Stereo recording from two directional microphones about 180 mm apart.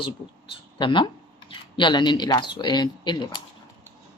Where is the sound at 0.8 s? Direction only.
25° left (ahead or behind).